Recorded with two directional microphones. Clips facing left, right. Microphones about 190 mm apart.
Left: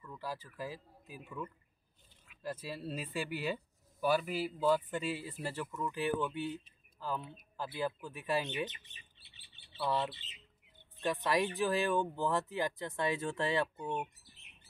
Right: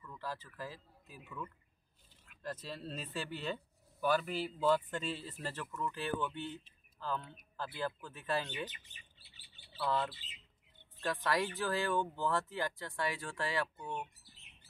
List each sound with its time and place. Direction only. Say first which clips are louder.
0.1 s speech: left 2 dB; 10° left (ahead or behind)